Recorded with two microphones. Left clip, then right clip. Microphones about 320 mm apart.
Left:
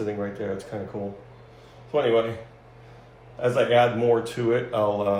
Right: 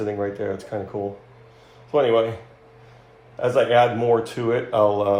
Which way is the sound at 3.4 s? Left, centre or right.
Right.